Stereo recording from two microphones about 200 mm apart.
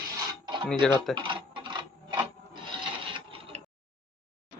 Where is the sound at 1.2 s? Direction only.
25° right (ahead or behind).